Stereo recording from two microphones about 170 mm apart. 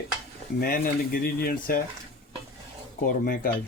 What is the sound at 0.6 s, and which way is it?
Speech, 60° left (ahead or behind).